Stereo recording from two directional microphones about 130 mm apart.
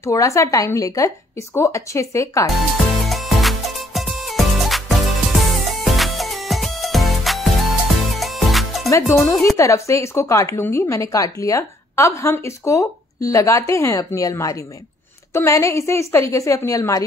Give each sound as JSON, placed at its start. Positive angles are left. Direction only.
{"t": 0.0, "sound": "a woman's voice", "side_deg": 25}
{"t": 2.5, "sound": "music", "side_deg": 0}
{"t": 8.9, "sound": "a woman's voice", "side_deg": 20}